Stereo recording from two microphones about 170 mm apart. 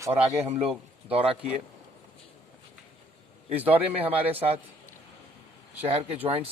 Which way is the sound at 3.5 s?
10° right (ahead or behind).